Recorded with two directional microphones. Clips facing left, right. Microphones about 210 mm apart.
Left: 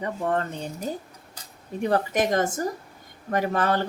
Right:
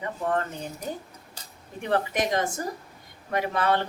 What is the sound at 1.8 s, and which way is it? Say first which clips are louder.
A woman's voice: left 3 dB; 40° left (ahead or behind).